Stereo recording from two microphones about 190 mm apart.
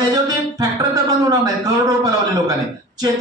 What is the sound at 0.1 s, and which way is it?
Music, 20° right (ahead or behind).